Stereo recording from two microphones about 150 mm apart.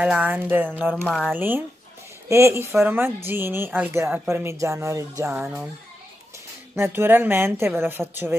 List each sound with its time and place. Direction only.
0.0 s speech: 10° right (ahead or behind)
1.0 s speech: 5° left (ahead or behind)
1.3 s speech: 15° right (ahead or behind)
5.4 s speech: 5° right (ahead or behind)
6.7 s speech: 15° right (ahead or behind)